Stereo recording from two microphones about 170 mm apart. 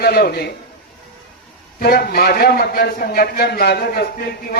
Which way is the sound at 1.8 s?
65° left (ahead or behind).